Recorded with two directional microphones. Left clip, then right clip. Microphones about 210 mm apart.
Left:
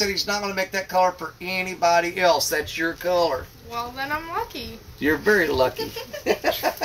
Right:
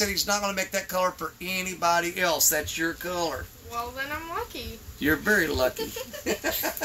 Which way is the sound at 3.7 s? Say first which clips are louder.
Left 4 dB; 15° left (ahead or behind).